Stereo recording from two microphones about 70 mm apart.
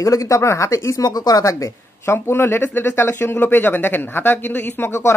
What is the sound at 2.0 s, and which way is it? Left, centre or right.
Speech, left.